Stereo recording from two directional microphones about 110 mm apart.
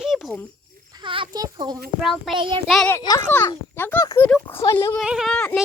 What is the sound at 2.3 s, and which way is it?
Speech, 50° right (ahead or behind).